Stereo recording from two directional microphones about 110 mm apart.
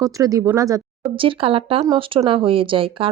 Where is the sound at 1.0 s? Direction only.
50° right (ahead or behind).